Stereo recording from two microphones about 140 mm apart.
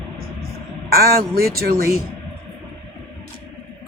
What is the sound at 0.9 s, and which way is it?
Speech, 90° right.